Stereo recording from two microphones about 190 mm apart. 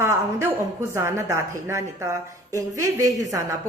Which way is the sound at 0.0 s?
15° right (ahead or behind).